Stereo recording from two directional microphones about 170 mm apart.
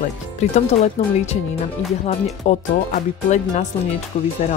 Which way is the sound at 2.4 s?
45° left (ahead or behind).